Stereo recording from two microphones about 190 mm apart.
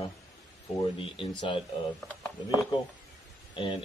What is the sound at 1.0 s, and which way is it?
Speech, 25° left (ahead or behind).